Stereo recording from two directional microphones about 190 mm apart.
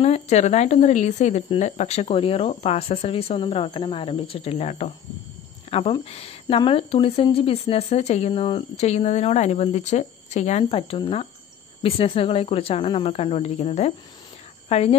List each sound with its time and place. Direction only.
0.0 s speech: 35° left (ahead or behind)